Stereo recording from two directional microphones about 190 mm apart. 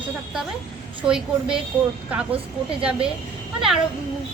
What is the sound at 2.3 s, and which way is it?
Speech, 30° right (ahead or behind).